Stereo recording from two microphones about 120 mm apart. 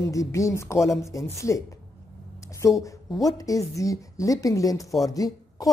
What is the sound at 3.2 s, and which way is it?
A woman's voice, 30° left (ahead or behind).